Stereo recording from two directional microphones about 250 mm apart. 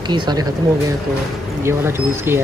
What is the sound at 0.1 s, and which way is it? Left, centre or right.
Speech, centre.